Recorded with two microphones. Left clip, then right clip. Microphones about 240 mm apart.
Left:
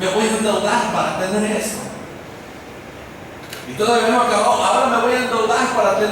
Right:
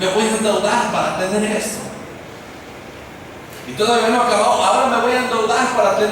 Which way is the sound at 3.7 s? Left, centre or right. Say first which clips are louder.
Even; centre.